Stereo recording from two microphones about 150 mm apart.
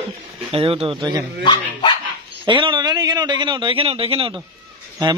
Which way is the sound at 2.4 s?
35° right (ahead or behind).